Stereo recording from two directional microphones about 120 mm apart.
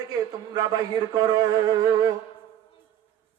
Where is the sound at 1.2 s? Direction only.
30° right (ahead or behind).